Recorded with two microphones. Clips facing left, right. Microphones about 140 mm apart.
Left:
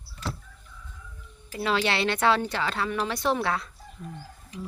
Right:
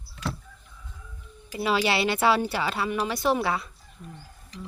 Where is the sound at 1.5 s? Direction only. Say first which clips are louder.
Right 1 dB; 5° right (ahead or behind).